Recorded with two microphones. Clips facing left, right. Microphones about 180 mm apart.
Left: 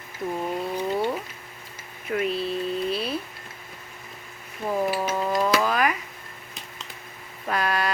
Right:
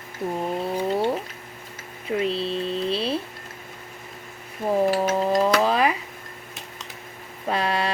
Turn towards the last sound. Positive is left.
turn(degrees=-25)  # may be behind; listen again after turning